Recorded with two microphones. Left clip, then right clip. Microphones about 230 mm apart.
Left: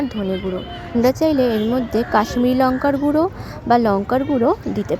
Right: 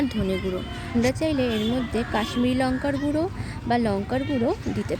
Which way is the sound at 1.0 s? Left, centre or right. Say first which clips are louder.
Left 8 dB; left.